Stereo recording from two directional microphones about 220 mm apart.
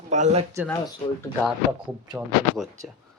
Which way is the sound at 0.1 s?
35° right (ahead or behind).